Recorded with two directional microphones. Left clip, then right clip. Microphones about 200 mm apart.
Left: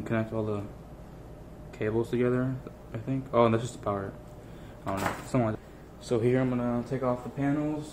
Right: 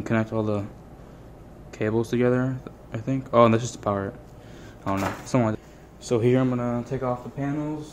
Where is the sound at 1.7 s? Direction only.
50° right (ahead or behind).